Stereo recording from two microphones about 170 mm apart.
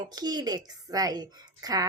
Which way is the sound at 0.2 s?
25° right (ahead or behind).